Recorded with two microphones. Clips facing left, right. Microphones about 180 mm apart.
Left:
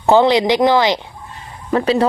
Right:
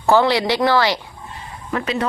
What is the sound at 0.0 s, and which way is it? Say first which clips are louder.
Speech: left 4 dB; 20° left (ahead or behind).